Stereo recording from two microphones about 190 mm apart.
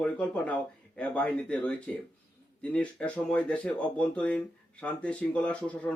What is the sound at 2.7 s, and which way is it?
Speech, 5° left (ahead or behind).